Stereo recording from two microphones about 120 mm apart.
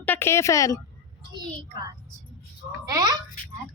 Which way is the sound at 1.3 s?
35° right (ahead or behind).